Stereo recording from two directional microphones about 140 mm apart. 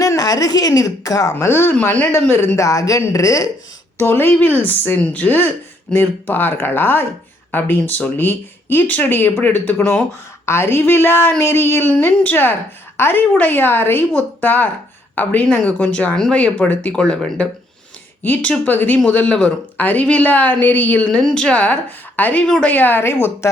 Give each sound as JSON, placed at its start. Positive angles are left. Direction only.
{"t": 0.0, "sound": "speech", "side_deg": 25}